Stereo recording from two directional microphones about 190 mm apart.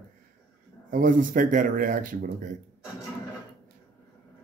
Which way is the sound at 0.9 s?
45° right (ahead or behind).